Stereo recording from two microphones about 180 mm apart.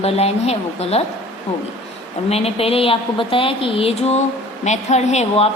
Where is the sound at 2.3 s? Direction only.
35° left (ahead or behind).